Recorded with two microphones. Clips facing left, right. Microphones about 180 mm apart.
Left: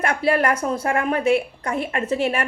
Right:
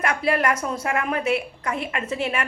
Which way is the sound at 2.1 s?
45° left (ahead or behind).